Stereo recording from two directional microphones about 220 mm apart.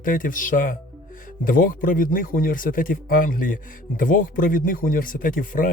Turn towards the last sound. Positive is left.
turn(degrees=40)  # may be behind; listen again after turning